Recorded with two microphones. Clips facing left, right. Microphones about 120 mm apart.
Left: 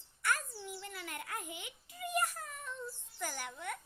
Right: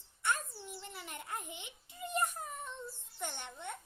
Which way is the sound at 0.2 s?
25° right (ahead or behind).